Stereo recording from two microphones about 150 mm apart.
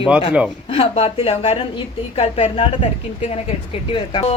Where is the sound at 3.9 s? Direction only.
35° left (ahead or behind).